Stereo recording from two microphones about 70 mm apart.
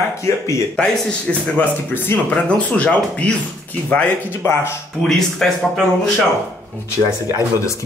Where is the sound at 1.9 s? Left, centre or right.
Left.